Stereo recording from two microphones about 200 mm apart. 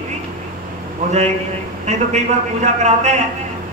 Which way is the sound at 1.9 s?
35° right (ahead or behind).